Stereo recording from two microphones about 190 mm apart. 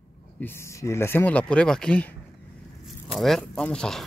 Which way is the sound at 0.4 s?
10° left (ahead or behind).